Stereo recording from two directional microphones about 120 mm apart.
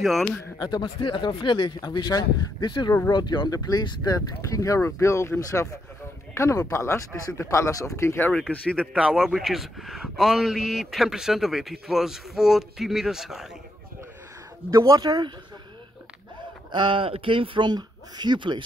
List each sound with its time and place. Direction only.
0.0 s a man's voice: centre (ahead or behind)
0.6 s speech: 40° left (ahead or behind); by 8.3 s 25° left (ahead or behind)
8.3 s speech: 10° left (ahead or behind)
8.9 s a man's voice: 5° right (ahead or behind)
14.7 s speech: 30° right (ahead or behind)
16.7 s speech: 45° right (ahead or behind)